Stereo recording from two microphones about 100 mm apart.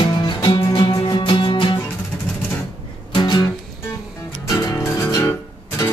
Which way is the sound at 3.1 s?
45° left (ahead or behind).